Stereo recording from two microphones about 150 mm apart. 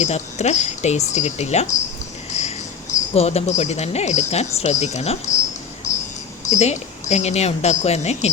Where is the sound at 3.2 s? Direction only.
45° left (ahead or behind).